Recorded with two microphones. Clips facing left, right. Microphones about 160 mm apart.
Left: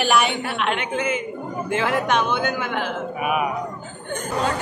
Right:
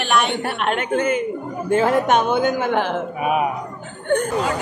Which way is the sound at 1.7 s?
40° right (ahead or behind).